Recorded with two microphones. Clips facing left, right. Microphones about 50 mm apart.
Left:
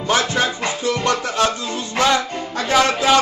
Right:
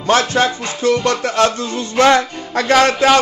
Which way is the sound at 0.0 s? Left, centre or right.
Right.